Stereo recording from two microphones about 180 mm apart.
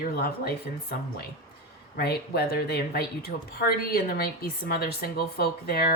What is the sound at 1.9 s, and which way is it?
Speech, 60° left (ahead or behind).